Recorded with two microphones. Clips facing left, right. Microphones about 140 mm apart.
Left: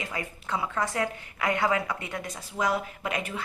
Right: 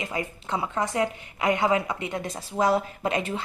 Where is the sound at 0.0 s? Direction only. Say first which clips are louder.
Right 4 dB; 25° right (ahead or behind).